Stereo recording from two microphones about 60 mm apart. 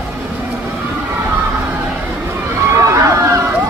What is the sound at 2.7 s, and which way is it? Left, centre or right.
Run, right.